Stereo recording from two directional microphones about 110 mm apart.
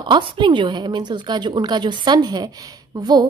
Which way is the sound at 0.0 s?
45° right (ahead or behind).